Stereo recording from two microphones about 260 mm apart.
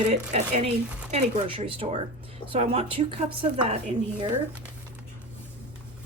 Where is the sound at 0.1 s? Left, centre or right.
Right.